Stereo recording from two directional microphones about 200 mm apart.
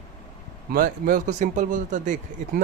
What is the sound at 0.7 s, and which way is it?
A man's voice, 45° right (ahead or behind).